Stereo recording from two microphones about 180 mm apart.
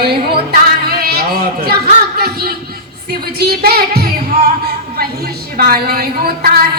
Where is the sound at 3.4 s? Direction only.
60° right (ahead or behind).